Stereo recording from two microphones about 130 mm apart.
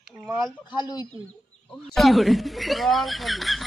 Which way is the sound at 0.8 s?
30° left (ahead or behind).